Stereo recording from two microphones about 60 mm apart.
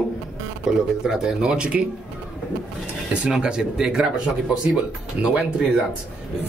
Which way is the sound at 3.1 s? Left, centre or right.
Centre.